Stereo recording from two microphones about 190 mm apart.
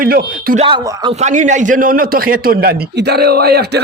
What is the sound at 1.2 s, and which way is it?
Speech, 40° right (ahead or behind).